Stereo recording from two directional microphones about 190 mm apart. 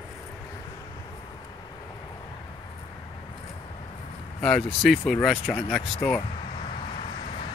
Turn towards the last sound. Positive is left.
turn(degrees=5)  # may be behind; listen again after turning